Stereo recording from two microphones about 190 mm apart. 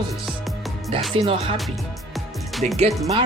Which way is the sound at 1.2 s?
30° right (ahead or behind).